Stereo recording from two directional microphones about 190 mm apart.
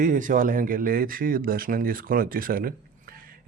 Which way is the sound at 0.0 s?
45° right (ahead or behind).